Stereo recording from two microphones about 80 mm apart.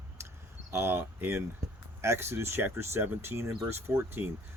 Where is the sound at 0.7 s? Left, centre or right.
Right.